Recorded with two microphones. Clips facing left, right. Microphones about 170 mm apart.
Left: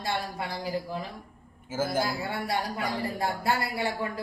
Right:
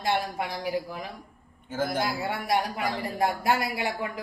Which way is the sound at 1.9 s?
20° right (ahead or behind).